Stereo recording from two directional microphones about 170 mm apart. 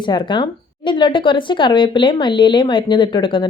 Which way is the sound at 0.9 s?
30° left (ahead or behind).